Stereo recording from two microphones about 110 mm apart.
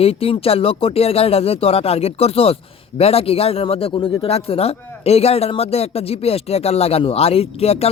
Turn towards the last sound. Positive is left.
turn(degrees=70)  # may be behind; listen again after turning